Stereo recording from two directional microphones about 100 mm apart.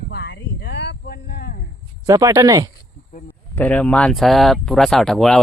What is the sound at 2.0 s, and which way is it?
Speech, 35° right (ahead or behind).